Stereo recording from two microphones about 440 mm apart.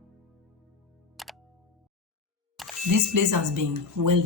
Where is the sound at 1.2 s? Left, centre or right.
Centre.